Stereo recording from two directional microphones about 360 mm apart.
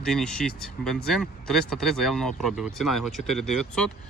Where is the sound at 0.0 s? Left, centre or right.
Centre.